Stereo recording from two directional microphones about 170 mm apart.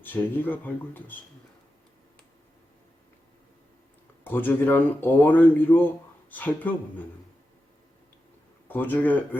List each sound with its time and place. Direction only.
0.0 s speech: 10° left (ahead or behind)
4.2 s speech: 10° left (ahead or behind)
8.6 s speech: 10° left (ahead or behind)